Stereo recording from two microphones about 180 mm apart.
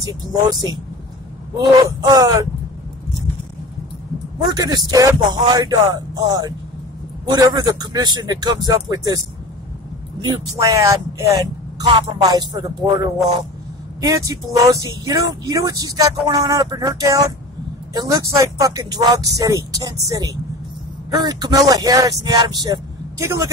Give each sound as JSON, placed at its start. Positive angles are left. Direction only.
{"t": 1.6, "sound": "speech", "side_deg": -20}
{"t": 4.4, "sound": "speech", "side_deg": -20}
{"t": 10.2, "sound": "a man's voice", "side_deg": -25}